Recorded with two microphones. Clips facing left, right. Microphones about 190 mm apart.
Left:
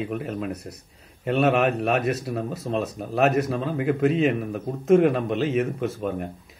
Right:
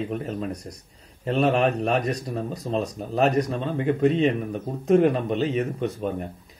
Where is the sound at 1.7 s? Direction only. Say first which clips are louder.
Left 1 dB; 5° left (ahead or behind).